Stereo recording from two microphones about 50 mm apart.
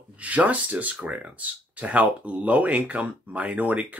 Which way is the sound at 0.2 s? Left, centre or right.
Right.